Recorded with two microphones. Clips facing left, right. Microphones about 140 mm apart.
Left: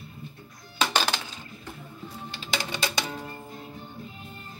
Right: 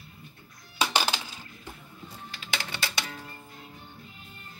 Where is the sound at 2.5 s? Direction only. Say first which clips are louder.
Left 4 dB; 15° left (ahead or behind).